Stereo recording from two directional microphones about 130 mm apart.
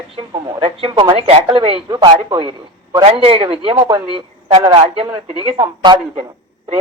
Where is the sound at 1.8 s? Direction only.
30° right (ahead or behind).